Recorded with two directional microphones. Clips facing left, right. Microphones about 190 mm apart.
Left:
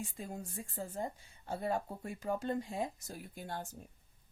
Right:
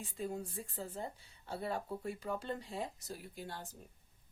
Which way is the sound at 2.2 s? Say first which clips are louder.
Left 4 dB; 45° left (ahead or behind).